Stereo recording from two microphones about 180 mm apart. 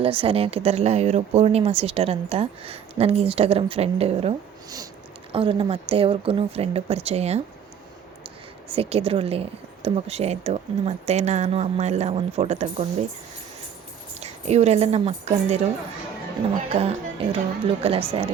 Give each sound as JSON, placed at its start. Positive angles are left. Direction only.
{"t": 0.0, "sound": "speech", "side_deg": -30}
{"t": 8.7, "sound": "speech", "side_deg": -35}
{"t": 14.2, "sound": "a woman's voice", "side_deg": -35}
{"t": 16.6, "sound": "speech", "side_deg": -35}